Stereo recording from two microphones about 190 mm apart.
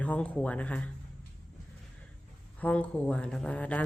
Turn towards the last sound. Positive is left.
turn(degrees=5)  # may be behind; listen again after turning